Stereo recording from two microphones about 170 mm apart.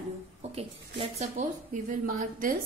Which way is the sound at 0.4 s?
35° right (ahead or behind).